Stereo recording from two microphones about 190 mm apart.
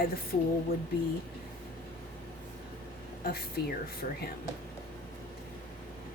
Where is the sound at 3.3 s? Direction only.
55° left (ahead or behind).